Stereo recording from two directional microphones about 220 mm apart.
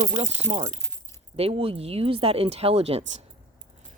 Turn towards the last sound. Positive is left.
turn(degrees=-25)  # may be behind; listen again after turning